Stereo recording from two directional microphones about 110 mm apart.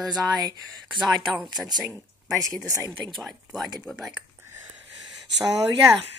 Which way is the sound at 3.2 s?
Centre (ahead or behind).